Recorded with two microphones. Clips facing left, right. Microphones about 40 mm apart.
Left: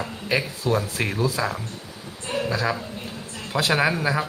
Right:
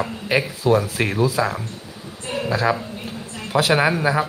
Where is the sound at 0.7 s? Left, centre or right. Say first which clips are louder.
Right 5 dB; centre.